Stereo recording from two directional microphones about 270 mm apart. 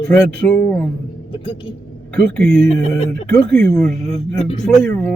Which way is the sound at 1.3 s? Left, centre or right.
Centre.